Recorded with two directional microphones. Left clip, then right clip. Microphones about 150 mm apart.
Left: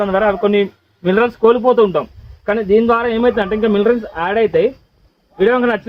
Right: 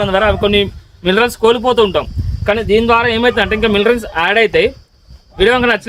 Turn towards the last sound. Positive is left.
turn(degrees=-20)  # may be behind; listen again after turning